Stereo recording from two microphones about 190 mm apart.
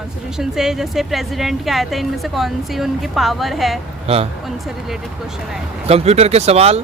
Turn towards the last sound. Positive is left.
turn(degrees=-35)  # may be behind; listen again after turning